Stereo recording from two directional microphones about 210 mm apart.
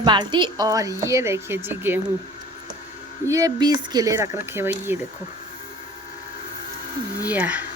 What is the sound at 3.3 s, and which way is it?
Speech, 15° right (ahead or behind).